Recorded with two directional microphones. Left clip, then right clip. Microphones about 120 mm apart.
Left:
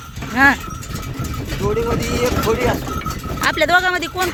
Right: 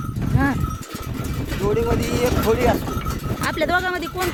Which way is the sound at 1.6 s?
25° right (ahead or behind).